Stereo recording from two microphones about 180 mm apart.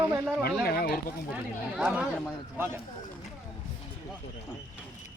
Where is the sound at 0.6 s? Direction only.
60° left (ahead or behind).